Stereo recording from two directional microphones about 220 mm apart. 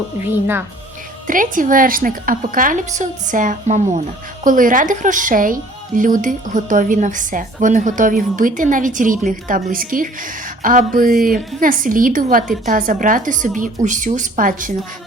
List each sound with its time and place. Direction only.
0.3 s speech: 10° right (ahead or behind)
1.3 s a woman's voice: 40° right (ahead or behind)